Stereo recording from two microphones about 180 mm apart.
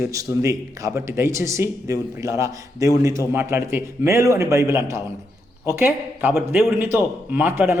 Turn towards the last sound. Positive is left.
turn(degrees=-10)  # may be behind; listen again after turning